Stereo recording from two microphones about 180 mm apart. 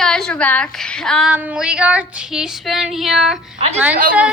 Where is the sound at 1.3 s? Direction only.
5° right (ahead or behind).